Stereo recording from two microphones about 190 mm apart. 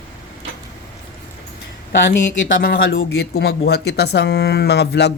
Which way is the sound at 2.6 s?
55° left (ahead or behind).